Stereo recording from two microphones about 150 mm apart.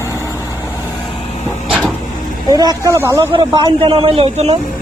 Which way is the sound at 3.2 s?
30° right (ahead or behind).